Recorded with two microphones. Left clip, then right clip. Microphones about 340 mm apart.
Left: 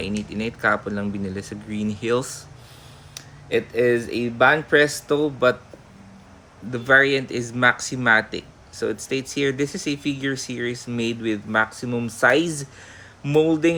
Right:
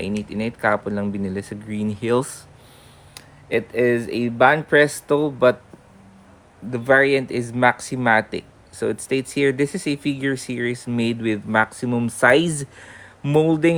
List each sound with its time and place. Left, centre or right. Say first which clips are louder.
0.0 s speech: right 1 dB; centre
6.7 s speech: right 1 dB; centre